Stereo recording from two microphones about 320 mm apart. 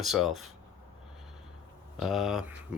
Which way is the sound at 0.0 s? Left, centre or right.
Centre.